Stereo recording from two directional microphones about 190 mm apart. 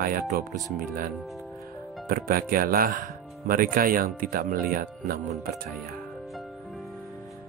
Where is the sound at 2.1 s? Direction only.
50° right (ahead or behind).